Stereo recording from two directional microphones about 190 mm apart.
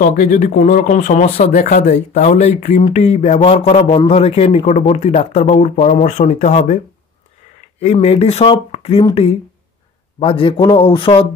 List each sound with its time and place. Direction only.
0.0 s speech: 45° left (ahead or behind)
7.8 s a man's voice: 35° left (ahead or behind)